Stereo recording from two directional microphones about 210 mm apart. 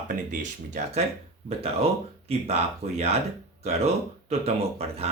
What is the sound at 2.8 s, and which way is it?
Speech, 30° right (ahead or behind).